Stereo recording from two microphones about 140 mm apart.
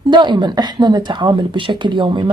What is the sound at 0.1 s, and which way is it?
Speech, 35° right (ahead or behind).